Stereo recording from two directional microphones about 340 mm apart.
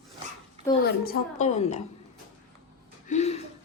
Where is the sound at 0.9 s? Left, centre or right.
Left.